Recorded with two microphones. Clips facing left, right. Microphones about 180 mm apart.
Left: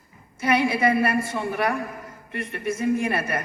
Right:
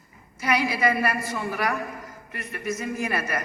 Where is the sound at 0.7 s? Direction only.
25° left (ahead or behind).